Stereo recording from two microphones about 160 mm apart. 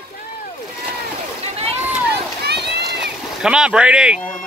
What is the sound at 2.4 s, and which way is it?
Run, 90° right.